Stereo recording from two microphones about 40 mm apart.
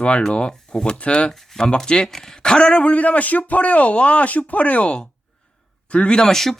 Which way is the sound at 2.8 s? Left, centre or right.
Left.